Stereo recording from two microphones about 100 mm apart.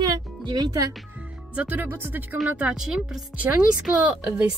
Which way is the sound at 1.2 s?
15° right (ahead or behind).